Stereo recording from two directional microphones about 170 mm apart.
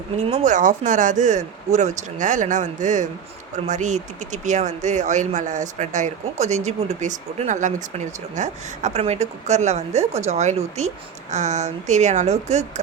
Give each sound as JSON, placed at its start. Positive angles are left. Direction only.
{"t": 0.2, "sound": "speech", "side_deg": -45}